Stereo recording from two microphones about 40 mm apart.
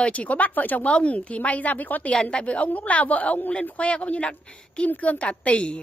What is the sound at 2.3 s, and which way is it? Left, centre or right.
A woman's voice, left.